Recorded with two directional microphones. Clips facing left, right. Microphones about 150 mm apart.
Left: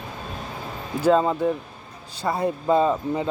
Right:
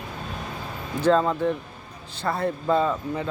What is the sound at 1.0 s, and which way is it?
Speech, 10° left (ahead or behind).